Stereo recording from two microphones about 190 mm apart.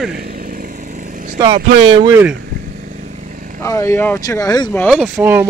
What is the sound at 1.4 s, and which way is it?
Speech, 25° right (ahead or behind).